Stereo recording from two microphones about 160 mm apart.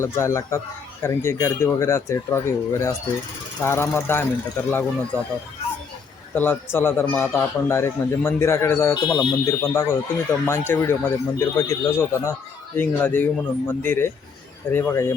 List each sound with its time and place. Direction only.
0.0 s speech: 15° left (ahead or behind)
6.3 s speech: 10° left (ahead or behind)
9.6 s speech: 15° left (ahead or behind)